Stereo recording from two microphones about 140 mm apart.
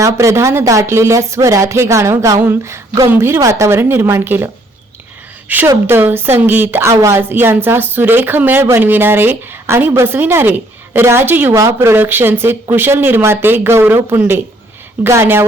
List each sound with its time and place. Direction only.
0.0 s a woman's voice: 20° right (ahead or behind)
5.5 s a woman's voice: 15° right (ahead or behind)